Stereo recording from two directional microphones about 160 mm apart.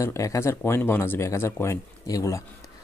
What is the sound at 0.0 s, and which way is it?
Speech, 20° left (ahead or behind).